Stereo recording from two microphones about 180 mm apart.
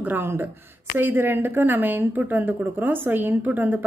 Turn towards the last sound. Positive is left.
turn(degrees=-10)  # may be behind; listen again after turning